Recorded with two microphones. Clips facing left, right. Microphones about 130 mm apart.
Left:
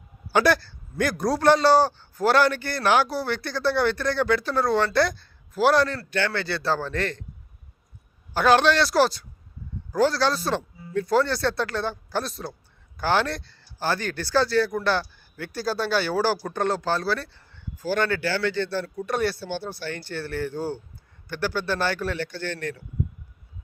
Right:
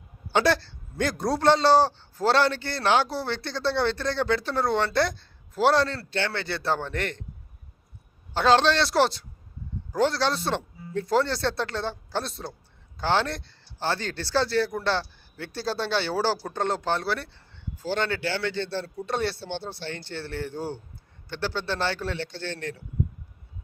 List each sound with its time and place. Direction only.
0.3 s speech: 25° right (ahead or behind)
8.3 s speech: 25° right (ahead or behind)